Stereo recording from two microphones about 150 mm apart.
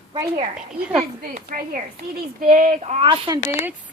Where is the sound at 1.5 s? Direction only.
70° right (ahead or behind).